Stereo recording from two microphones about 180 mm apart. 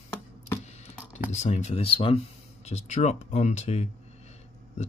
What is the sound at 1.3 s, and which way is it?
Speech, 40° left (ahead or behind).